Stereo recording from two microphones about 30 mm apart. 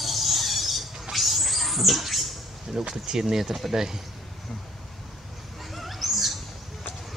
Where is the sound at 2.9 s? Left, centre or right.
Centre.